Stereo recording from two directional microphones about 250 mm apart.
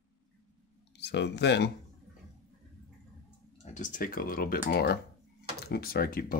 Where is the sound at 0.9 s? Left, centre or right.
Left.